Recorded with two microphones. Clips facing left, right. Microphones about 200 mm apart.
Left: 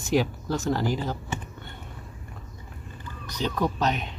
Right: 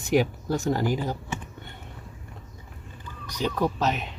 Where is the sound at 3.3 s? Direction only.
10° right (ahead or behind).